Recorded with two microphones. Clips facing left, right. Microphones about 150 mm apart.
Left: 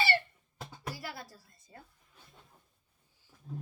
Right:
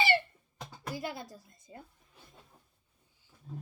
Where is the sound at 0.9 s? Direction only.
20° right (ahead or behind).